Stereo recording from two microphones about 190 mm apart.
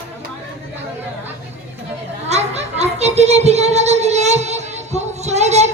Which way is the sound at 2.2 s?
35° right (ahead or behind).